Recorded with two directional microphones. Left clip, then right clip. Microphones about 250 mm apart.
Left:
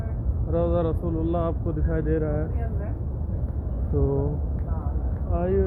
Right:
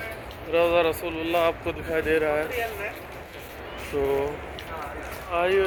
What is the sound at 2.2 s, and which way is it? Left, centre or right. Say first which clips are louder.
Speech: right 5 dB; centre.